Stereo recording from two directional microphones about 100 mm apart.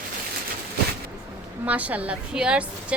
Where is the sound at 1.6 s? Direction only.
15° right (ahead or behind).